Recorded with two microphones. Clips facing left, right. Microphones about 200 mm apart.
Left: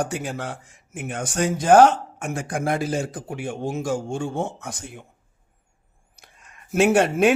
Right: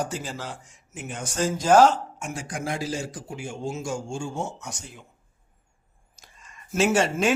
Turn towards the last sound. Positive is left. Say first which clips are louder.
# left 5 dB
turn(degrees=60)  # may be behind; listen again after turning